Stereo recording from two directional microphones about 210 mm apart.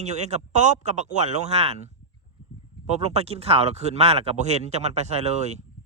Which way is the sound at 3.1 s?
30° right (ahead or behind).